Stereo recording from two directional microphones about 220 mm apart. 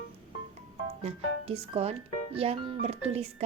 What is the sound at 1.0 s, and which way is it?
Speech, 25° right (ahead or behind).